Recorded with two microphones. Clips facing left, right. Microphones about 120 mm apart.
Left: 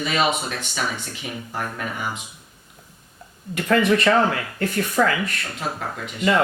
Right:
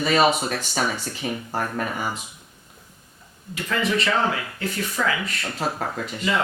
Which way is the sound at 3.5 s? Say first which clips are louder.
Left 6 dB; 55° left (ahead or behind).